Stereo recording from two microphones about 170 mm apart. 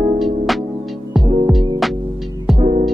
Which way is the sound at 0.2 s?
Centre (ahead or behind).